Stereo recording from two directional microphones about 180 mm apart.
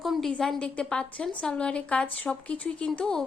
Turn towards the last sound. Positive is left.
turn(degrees=5)  # may be behind; listen again after turning